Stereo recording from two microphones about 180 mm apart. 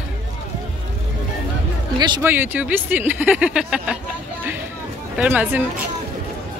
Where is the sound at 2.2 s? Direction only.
10° right (ahead or behind).